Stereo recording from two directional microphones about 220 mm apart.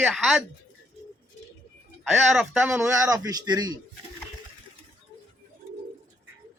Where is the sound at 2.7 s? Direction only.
10° right (ahead or behind).